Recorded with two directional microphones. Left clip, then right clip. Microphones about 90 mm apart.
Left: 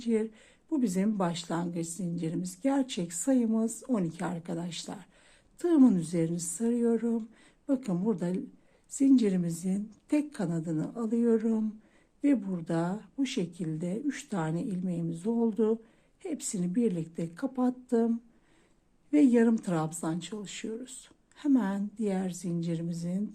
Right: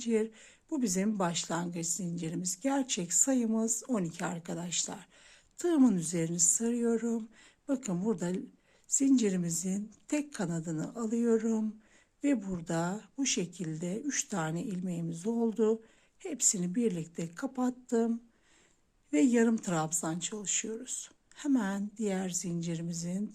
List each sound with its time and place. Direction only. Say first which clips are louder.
0.0 s speech: left 1 dB; 25° right (ahead or behind)